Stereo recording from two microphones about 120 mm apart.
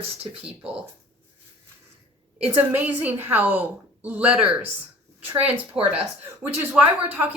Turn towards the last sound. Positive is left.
turn(degrees=-15)  # may be behind; listen again after turning